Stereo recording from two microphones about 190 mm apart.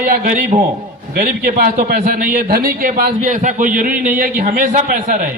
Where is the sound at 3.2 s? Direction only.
40° right (ahead or behind).